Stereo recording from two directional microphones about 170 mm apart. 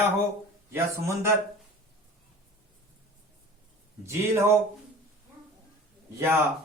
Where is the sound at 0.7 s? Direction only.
15° right (ahead or behind).